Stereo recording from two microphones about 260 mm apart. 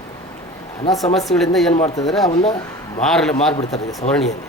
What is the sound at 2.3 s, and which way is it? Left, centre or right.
Speech, left.